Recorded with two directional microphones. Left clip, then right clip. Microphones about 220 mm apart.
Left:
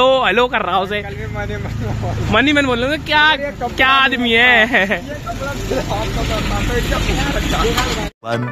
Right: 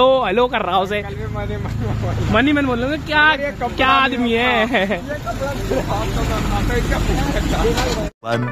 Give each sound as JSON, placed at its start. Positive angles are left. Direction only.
{"t": 0.0, "sound": "speech", "side_deg": -5}
{"t": 2.3, "sound": "speech", "side_deg": 45}
{"t": 3.4, "sound": "speech", "side_deg": 5}